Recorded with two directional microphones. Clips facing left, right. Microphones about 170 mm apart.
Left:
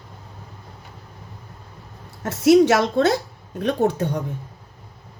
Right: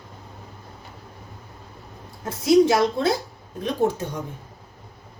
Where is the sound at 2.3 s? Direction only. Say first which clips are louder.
Left 3 dB; 75° left (ahead or behind).